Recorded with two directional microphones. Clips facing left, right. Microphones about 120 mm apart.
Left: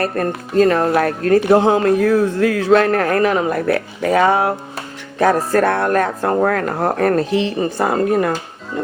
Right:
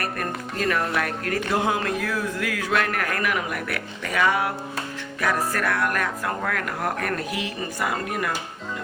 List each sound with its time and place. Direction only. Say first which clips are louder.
0.0 s speech: left 9 dB; 30° left (ahead or behind)